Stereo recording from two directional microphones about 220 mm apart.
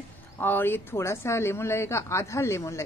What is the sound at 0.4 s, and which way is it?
Speech, 10° left (ahead or behind).